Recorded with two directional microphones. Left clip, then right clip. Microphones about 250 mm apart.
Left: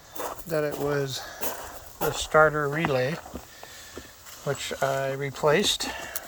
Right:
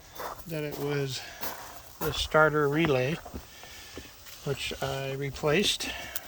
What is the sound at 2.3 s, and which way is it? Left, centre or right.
Speech, centre.